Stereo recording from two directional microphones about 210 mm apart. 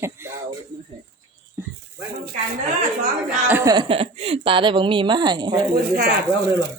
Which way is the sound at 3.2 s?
10° right (ahead or behind).